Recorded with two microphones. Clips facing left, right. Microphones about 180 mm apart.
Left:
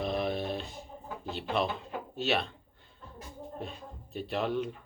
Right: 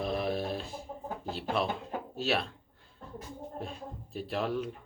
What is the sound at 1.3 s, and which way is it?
Speech, centre (ahead or behind).